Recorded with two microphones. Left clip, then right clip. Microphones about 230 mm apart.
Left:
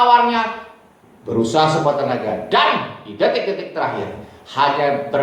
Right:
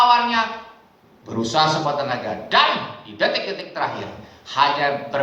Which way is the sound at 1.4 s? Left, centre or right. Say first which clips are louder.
Left 3 dB; right.